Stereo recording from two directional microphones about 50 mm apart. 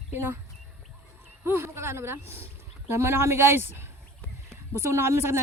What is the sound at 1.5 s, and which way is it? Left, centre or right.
Speech, right.